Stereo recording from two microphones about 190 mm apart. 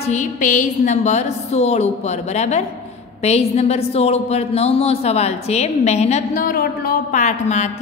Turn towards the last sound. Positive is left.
turn(degrees=35)  # may be behind; listen again after turning